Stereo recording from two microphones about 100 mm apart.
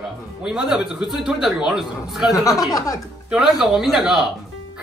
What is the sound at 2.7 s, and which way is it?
Speech, 35° left (ahead or behind).